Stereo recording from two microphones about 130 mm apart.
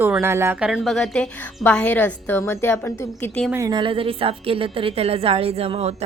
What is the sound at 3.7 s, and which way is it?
A woman's voice, 40° right (ahead or behind).